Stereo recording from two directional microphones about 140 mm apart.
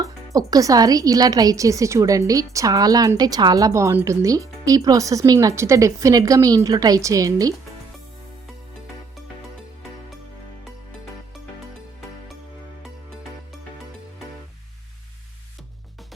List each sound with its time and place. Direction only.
0.3 s a woman's voice: 25° right (ahead or behind)